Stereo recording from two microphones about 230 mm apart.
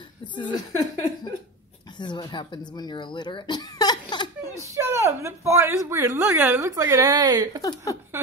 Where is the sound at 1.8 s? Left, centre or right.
Centre.